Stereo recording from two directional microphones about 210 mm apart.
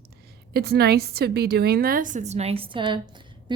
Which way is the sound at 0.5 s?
50° right (ahead or behind).